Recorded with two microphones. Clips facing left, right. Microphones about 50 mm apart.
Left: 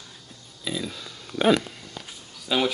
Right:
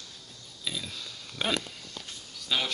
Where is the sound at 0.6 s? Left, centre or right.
Centre.